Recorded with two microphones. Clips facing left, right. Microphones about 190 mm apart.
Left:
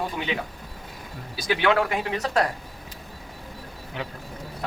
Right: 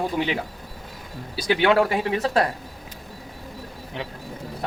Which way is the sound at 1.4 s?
30° right (ahead or behind).